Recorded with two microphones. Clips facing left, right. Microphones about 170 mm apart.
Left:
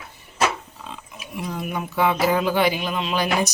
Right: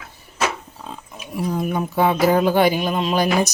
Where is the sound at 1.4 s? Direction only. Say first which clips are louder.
Right 6 dB; 40° right (ahead or behind).